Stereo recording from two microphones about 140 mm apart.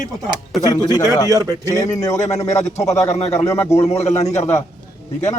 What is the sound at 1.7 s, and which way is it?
Speech, 20° left (ahead or behind).